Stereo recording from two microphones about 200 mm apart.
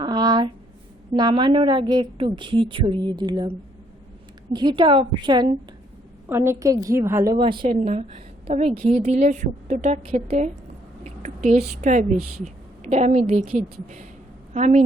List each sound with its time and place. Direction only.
0.0 s a sound: 20° right (ahead or behind)
1.1 s a woman's voice: 25° right (ahead or behind)
4.5 s a woman's voice: 25° right (ahead or behind)
6.2 s a woman's voice: 10° right (ahead or behind)
7.3 s a woman's voice: 25° right (ahead or behind)